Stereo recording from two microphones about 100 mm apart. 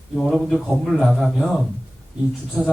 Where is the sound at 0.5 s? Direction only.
Centre (ahead or behind).